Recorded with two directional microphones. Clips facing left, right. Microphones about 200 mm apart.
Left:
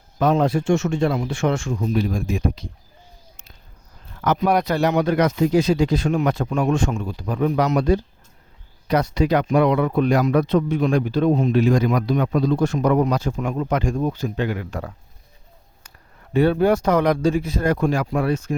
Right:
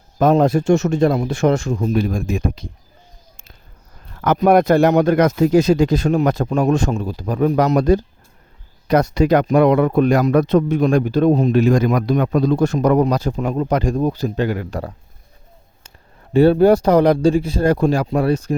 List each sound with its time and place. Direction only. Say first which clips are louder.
0.2 s speech: right 4 dB; 45° right (ahead or behind)
4.4 s speech: right 9 dB; 50° right (ahead or behind)
16.3 s speech: right 6 dB; 30° right (ahead or behind)